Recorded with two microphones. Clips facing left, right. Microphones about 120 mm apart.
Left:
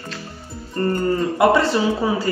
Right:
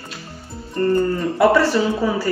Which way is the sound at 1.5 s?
25° left (ahead or behind).